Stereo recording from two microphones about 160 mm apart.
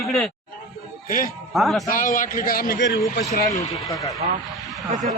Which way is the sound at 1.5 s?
Centre (ahead or behind).